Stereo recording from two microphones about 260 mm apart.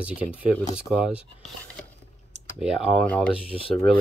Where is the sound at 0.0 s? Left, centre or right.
Centre.